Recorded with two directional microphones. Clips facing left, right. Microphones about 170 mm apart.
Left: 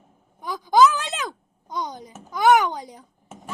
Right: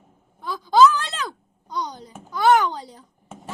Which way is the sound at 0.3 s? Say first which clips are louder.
Right 1 dB; 15° left (ahead or behind).